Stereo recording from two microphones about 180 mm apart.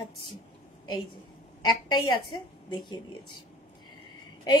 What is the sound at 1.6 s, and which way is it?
A woman's voice, 20° left (ahead or behind).